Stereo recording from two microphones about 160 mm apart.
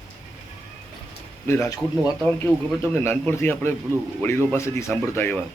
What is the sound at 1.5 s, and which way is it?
Speech, 15° left (ahead or behind).